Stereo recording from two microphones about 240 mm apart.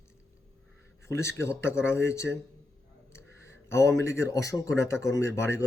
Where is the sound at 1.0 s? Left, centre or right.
Centre.